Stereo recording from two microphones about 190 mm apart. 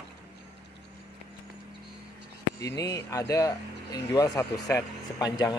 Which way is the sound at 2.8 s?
15° left (ahead or behind).